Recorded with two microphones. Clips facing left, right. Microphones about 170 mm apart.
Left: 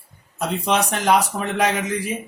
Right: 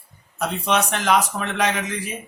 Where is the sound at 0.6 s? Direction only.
30° left (ahead or behind).